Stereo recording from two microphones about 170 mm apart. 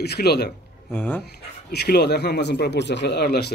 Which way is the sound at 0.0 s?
70° left (ahead or behind).